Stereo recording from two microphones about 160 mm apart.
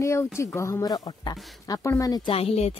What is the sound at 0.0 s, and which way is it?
Speech, 15° left (ahead or behind).